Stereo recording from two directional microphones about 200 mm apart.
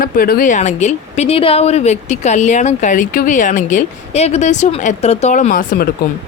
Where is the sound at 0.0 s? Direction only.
45° left (ahead or behind).